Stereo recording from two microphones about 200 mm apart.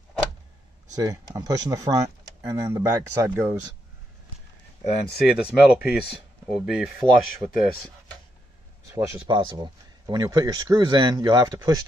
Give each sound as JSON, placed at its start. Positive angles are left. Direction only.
{"t": 0.9, "sound": "speech", "side_deg": -20}
{"t": 5.2, "sound": "speech", "side_deg": -5}
{"t": 8.9, "sound": "speech", "side_deg": -10}
{"t": 9.3, "sound": "speech", "side_deg": -20}